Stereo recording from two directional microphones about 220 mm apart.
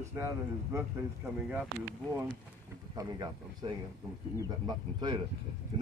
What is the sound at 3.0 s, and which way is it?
A man's voice, 20° right (ahead or behind).